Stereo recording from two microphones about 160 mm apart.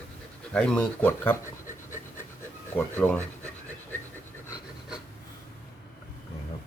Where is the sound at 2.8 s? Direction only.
10° left (ahead or behind).